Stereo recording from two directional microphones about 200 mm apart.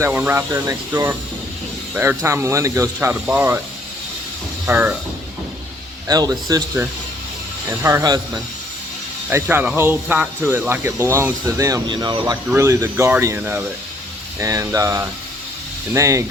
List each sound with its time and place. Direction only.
0.0 s speech: 10° right (ahead or behind)
4.6 s speech: 10° right (ahead or behind)
6.1 s speech: 20° right (ahead or behind)
9.3 s speech: 10° right (ahead or behind)